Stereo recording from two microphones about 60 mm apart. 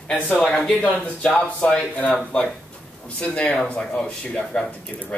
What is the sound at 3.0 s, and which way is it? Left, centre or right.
Speech, centre.